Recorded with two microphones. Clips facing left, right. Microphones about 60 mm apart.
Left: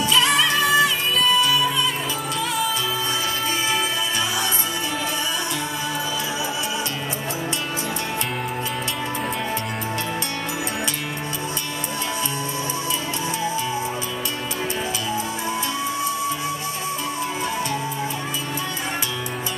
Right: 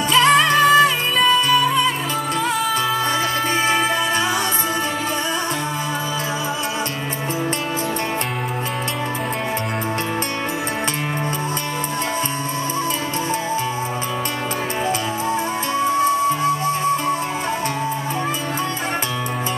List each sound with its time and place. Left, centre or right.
0.1 s music: right